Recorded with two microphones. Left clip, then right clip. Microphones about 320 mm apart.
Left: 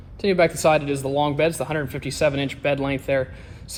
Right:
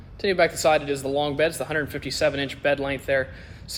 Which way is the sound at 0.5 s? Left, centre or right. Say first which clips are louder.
Left 2 dB; centre.